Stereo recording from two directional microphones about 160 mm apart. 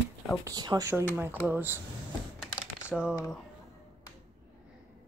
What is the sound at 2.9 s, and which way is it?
Speech, centre (ahead or behind).